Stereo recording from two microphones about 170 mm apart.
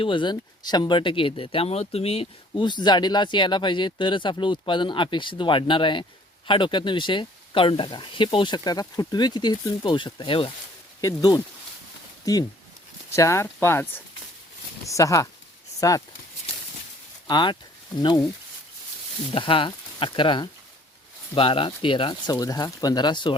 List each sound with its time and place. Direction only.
0.0 s speech: 30° left (ahead or behind)
17.2 s speech: 25° left (ahead or behind)
19.3 s speech: 30° left (ahead or behind)